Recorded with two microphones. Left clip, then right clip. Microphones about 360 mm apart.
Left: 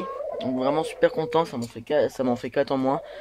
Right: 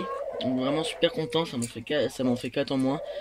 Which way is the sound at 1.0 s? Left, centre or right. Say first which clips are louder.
Left 6 dB; left.